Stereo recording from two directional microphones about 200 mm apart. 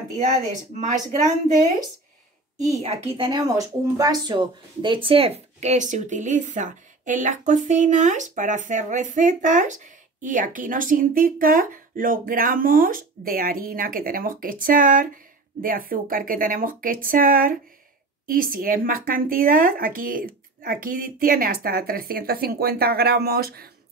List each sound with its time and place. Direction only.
2.6 s speech: 30° right (ahead or behind); by 23.7 s 50° right (ahead or behind)